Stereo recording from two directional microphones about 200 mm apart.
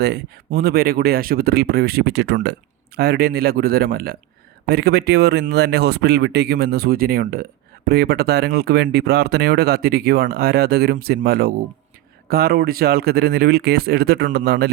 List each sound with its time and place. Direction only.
0.0 s speech: 50° right (ahead or behind)